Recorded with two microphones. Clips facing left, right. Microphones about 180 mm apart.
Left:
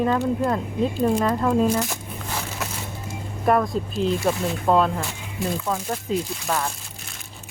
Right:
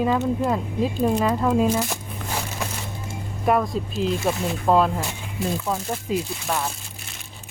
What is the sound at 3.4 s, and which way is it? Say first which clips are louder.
Speech: left 1 dB; centre (ahead or behind).